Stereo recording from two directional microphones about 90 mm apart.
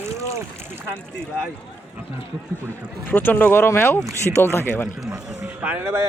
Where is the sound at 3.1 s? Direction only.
20° left (ahead or behind).